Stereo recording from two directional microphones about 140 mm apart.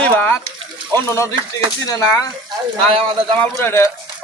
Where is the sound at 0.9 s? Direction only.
25° right (ahead or behind).